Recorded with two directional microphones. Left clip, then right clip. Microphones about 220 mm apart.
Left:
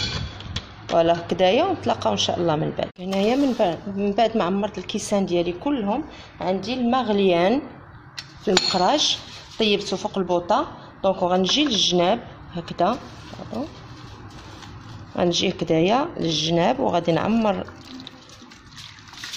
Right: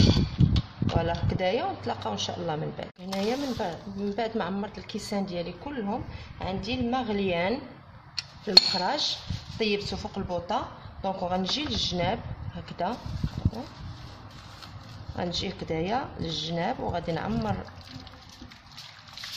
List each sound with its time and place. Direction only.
0.9 s speech: 30° left (ahead or behind)
15.1 s speech: 30° left (ahead or behind)